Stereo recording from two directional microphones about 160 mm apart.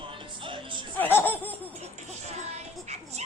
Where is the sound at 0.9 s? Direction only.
10° left (ahead or behind).